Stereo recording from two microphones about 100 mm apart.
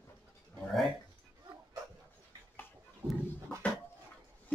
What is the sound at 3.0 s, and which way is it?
Dog, 15° right (ahead or behind).